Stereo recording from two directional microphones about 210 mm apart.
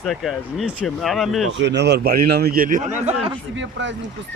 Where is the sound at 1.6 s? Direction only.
55° right (ahead or behind); by 3.4 s 30° right (ahead or behind).